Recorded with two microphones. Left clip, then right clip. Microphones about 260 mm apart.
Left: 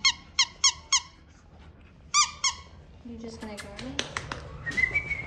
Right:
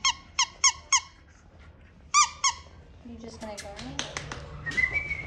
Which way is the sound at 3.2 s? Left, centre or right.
Centre.